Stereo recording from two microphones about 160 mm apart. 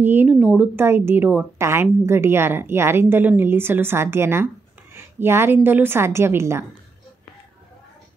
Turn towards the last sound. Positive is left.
turn(degrees=-15)  # may be behind; listen again after turning